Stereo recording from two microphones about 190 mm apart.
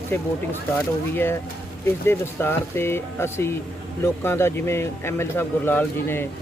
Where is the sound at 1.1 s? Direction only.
10° left (ahead or behind).